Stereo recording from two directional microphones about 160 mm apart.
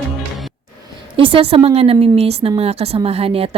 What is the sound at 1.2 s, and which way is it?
A woman's voice, 35° right (ahead or behind).